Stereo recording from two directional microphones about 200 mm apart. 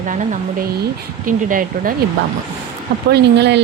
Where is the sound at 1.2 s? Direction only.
45° right (ahead or behind).